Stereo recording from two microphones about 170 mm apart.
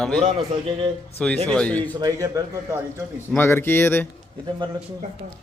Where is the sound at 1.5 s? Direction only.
5° left (ahead or behind).